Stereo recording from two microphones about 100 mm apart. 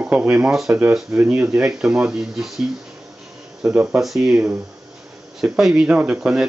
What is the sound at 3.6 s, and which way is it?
Speech, 15° right (ahead or behind).